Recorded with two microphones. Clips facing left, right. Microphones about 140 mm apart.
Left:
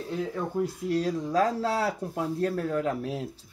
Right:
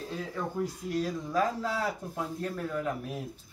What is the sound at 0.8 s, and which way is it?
Speech, 70° left (ahead or behind).